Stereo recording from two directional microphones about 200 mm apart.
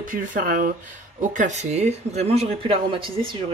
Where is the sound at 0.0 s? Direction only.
45° right (ahead or behind); by 3.3 s 25° right (ahead or behind).